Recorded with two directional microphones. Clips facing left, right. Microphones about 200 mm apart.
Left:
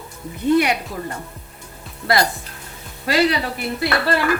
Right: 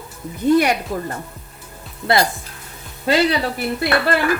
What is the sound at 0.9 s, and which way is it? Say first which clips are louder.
Speech: right 4 dB; 50° right (ahead or behind).